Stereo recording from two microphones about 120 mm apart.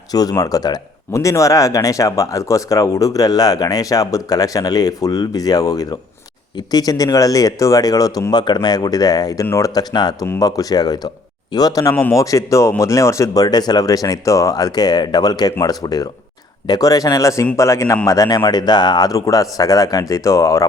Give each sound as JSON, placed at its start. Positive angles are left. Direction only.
{"t": 0.1, "sound": "a man's voice", "side_deg": 30}